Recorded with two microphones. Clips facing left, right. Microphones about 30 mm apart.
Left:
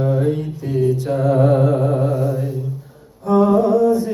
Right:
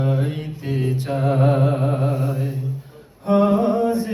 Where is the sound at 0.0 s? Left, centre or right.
Right.